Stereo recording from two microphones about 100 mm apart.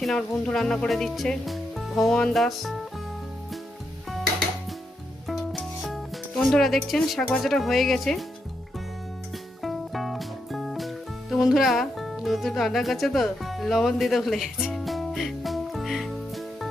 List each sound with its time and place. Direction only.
0.0 s speech: 5° left (ahead or behind)
5.3 s music: centre (ahead or behind)
7.4 s speech: centre (ahead or behind)
9.6 s music: centre (ahead or behind)